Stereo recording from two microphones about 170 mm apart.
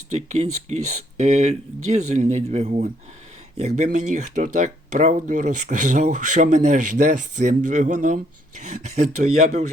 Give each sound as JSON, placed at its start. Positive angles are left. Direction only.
{"t": 0.2, "sound": "speech", "side_deg": -40}